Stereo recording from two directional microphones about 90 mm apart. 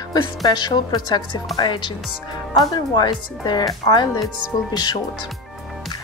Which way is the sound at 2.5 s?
50° left (ahead or behind).